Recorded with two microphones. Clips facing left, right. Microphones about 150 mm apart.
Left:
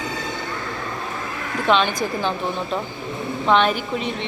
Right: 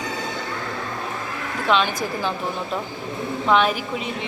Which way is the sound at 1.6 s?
5° right (ahead or behind).